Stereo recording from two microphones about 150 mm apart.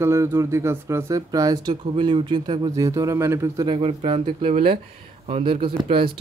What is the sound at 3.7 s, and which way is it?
Speech, 35° right (ahead or behind).